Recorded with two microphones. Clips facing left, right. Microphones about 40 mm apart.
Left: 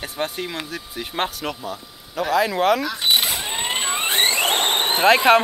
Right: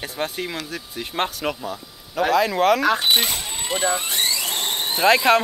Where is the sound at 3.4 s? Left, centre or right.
Left.